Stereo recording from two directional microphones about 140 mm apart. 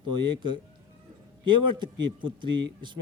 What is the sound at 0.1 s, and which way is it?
Speech, 35° right (ahead or behind).